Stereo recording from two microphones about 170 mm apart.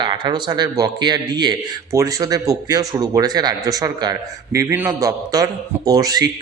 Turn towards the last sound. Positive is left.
turn(degrees=-20)  # may be behind; listen again after turning